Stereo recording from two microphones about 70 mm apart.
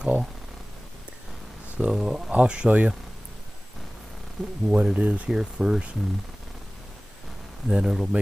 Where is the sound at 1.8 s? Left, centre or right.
Centre.